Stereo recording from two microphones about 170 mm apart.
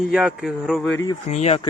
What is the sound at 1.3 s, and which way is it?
Speech, 40° left (ahead or behind).